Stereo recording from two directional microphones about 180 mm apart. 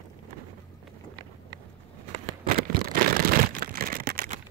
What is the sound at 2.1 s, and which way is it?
Crumpling, 55° right (ahead or behind).